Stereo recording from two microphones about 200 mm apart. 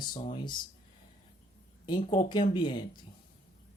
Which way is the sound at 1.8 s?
25° left (ahead or behind).